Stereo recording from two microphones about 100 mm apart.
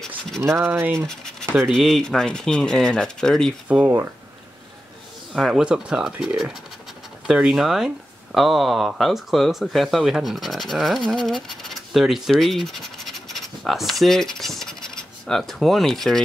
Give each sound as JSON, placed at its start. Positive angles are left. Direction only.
{"t": 0.4, "sound": "speech", "side_deg": -25}
{"t": 1.6, "sound": "speech", "side_deg": 0}
{"t": 3.6, "sound": "speech", "side_deg": -15}
{"t": 5.3, "sound": "speech", "side_deg": -5}